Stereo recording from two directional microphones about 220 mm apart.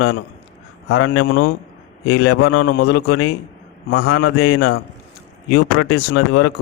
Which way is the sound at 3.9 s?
90° left.